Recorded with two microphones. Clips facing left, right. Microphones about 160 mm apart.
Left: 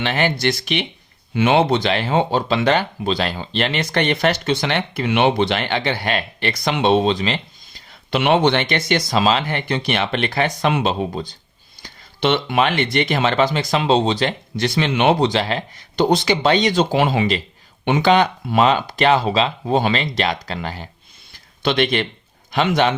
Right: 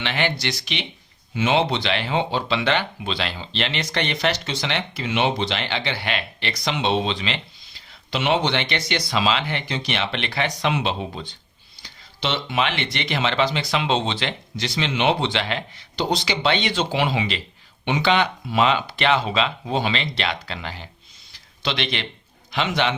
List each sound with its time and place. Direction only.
0.0 s speech: 45° left (ahead or behind)
11.8 s speech: 55° left (ahead or behind)
14.5 s speech: 55° left (ahead or behind)
21.3 s a sound: 50° left (ahead or behind)
22.5 s speech: 45° left (ahead or behind)